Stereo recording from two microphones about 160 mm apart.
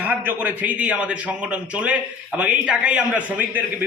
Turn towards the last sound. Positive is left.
turn(degrees=-10)  # may be behind; listen again after turning